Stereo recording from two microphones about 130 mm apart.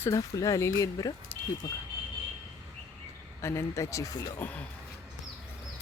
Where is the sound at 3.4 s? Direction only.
20° left (ahead or behind).